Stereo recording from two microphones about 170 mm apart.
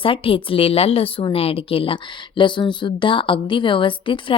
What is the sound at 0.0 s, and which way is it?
A woman's voice, 30° left (ahead or behind).